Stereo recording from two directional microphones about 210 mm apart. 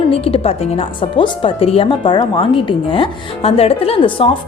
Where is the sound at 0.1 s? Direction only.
25° left (ahead or behind).